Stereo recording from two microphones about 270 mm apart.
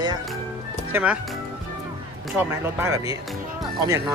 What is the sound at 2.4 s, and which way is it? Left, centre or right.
Speech, centre.